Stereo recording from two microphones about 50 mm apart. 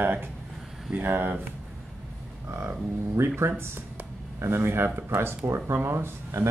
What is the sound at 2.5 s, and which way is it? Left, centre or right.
Speech, right.